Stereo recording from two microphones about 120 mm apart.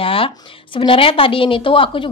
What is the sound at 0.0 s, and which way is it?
A woman's voice, 50° left (ahead or behind).